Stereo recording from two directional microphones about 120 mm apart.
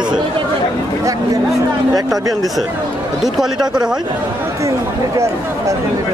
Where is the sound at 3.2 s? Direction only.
5° right (ahead or behind).